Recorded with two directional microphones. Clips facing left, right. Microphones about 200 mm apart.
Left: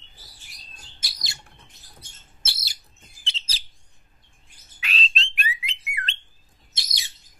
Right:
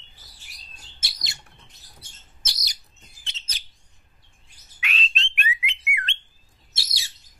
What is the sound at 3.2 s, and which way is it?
Chirp, 30° left (ahead or behind).